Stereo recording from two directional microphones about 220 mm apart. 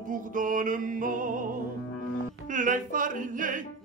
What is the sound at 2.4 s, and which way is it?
Music, 35° right (ahead or behind).